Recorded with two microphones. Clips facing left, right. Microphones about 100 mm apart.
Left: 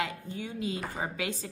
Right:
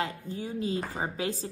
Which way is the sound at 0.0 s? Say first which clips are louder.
Right 1 dB; 35° right (ahead or behind).